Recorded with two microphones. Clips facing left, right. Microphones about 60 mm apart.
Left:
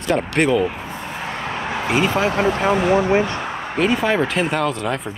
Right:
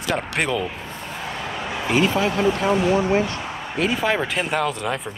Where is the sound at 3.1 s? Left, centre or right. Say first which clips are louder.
Left 3 dB; left.